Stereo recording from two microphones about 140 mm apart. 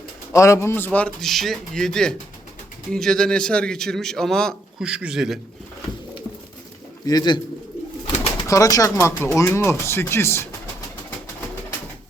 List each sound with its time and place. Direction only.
0.3 s speech: 20° left (ahead or behind)
0.9 s a man's voice: 5° left (ahead or behind)
7.0 s speech: 30° left (ahead or behind)
8.4 s speech: 25° left (ahead or behind)